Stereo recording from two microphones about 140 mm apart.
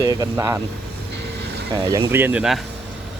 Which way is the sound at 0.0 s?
25° right (ahead or behind).